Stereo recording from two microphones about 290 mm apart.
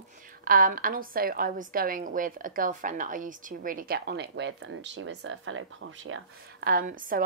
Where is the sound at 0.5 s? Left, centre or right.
Right.